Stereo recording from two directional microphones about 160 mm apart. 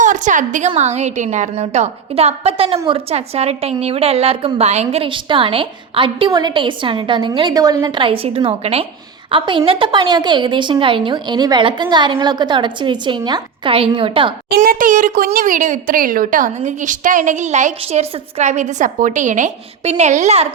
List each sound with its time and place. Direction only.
0.0 s a woman's voice: 50° right (ahead or behind); by 14.3 s 35° right (ahead or behind)
14.5 s speech: 65° right (ahead or behind); by 20.5 s 45° right (ahead or behind)